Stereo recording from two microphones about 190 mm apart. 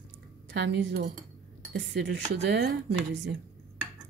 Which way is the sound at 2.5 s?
65° right (ahead or behind).